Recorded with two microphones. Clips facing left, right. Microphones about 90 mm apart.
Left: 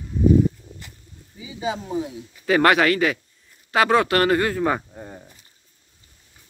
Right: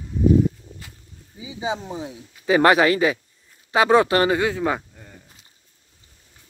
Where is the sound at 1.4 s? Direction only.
20° right (ahead or behind).